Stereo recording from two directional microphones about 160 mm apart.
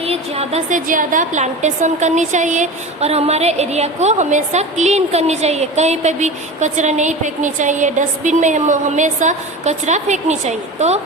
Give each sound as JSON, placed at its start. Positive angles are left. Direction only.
{"t": 0.0, "sound": "a woman's voice", "side_deg": -40}